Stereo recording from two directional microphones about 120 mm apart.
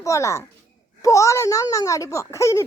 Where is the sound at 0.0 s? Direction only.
25° left (ahead or behind).